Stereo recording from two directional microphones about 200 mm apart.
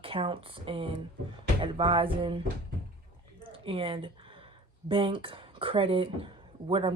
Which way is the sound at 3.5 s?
25° right (ahead or behind).